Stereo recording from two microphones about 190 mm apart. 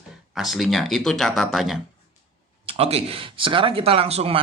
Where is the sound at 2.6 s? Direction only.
30° right (ahead or behind).